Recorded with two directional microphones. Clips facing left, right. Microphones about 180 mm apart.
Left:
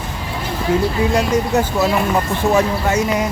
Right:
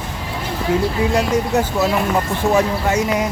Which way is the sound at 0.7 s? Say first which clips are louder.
Left 1 dB; 10° right (ahead or behind).